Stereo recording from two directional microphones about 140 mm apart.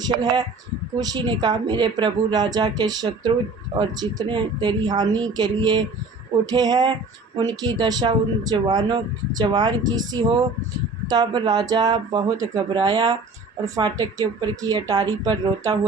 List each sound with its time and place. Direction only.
0.2 s speech: 30° right (ahead or behind)